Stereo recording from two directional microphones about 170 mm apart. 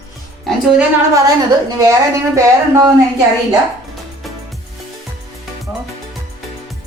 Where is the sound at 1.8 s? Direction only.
20° right (ahead or behind).